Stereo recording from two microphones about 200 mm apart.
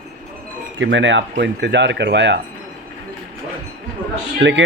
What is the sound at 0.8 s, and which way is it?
Speech, 65° right (ahead or behind).